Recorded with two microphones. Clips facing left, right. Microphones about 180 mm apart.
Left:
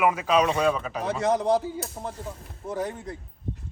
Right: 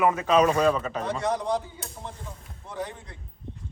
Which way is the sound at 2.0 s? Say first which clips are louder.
Left 5 dB; 35° left (ahead or behind).